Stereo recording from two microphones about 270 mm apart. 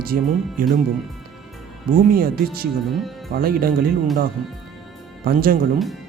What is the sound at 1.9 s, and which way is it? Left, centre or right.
Speech, right.